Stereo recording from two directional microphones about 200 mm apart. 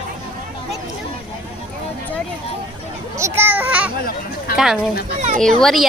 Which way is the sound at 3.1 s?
10° right (ahead or behind).